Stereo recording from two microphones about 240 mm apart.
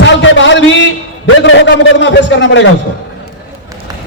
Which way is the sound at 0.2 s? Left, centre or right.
Left.